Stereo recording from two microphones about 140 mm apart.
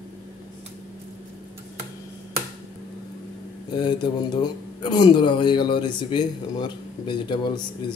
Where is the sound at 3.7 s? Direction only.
30° left (ahead or behind).